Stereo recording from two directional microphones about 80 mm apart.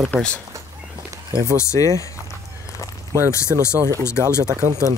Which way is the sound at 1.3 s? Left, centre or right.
Right.